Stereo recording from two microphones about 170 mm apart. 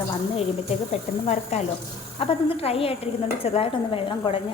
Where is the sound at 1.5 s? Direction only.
40° left (ahead or behind).